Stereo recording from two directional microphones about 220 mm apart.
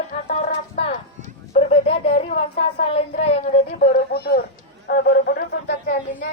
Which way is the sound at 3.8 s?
40° left (ahead or behind).